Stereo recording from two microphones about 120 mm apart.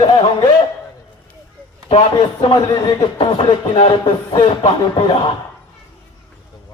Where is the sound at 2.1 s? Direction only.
40° left (ahead or behind).